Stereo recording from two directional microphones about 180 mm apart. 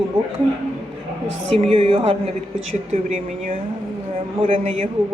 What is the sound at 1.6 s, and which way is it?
A man's voice, 35° right (ahead or behind).